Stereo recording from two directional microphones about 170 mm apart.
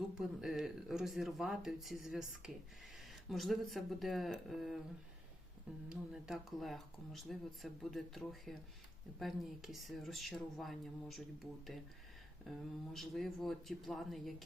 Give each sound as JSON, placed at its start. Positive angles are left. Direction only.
{"t": 0.2, "sound": "speech", "side_deg": -5}
{"t": 5.9, "sound": "speech", "side_deg": -5}
{"t": 12.5, "sound": "speech", "side_deg": 0}